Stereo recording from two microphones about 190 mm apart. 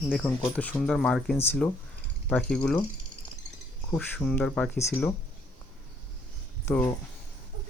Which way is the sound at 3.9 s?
5° left (ahead or behind).